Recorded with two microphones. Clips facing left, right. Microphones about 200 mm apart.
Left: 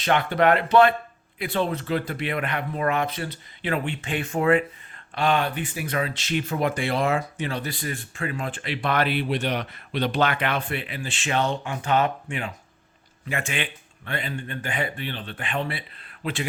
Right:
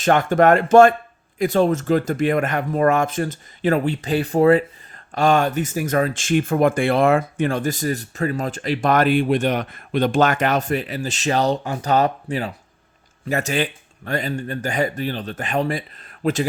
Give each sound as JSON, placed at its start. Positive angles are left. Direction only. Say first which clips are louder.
{"t": 0.0, "sound": "speech", "louder": "right 5 dB", "side_deg": -45}